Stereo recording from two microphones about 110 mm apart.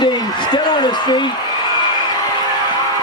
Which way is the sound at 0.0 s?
45° left (ahead or behind).